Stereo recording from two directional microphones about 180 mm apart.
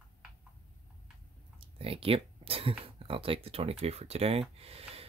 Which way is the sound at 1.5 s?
30° right (ahead or behind).